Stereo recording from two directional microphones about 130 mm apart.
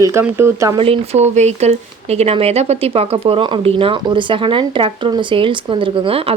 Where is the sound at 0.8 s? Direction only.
50° right (ahead or behind).